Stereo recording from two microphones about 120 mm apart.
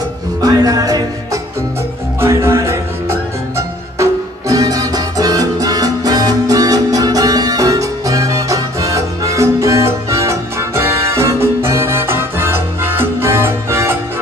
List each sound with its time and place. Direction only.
0.4 s music: 30° right (ahead or behind)